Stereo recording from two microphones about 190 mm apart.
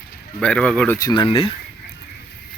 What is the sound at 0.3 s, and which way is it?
Speech, 5° left (ahead or behind).